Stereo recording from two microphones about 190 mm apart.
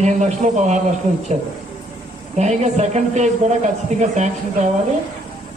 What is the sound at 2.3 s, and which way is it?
Speech, 35° right (ahead or behind).